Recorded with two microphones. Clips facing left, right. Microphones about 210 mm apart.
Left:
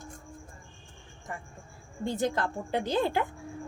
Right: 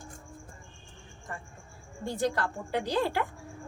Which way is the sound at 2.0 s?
20° left (ahead or behind).